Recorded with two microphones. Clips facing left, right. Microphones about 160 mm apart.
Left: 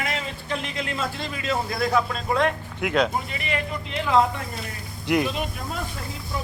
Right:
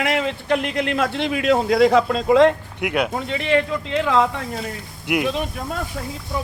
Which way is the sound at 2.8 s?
15° right (ahead or behind).